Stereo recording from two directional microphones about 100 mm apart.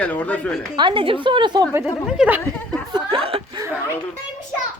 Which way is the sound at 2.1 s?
15° right (ahead or behind).